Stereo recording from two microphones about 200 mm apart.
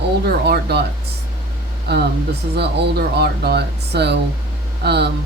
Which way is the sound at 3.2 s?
55° right (ahead or behind).